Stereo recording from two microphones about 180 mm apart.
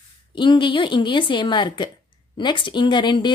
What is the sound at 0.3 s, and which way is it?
Speech, 25° left (ahead or behind).